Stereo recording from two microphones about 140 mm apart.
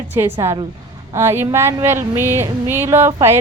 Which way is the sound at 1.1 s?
15° right (ahead or behind).